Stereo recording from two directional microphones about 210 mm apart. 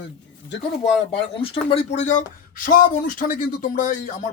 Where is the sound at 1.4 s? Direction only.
25° left (ahead or behind).